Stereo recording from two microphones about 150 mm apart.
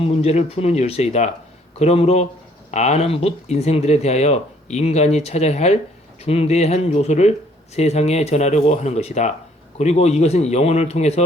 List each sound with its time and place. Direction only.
0.0 s speech: 45° left (ahead or behind)